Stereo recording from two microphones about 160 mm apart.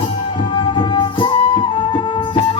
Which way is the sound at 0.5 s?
30° left (ahead or behind).